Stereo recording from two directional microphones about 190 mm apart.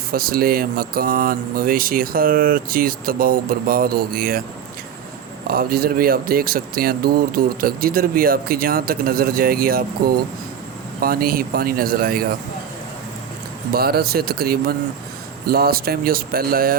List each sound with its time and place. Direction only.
0.1 s speech: 50° right (ahead or behind)
5.5 s speech: 50° right (ahead or behind)
11.0 s speech: 50° right (ahead or behind)
13.7 s speech: 55° right (ahead or behind)